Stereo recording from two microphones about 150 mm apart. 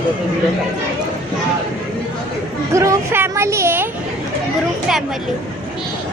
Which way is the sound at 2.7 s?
20° right (ahead or behind).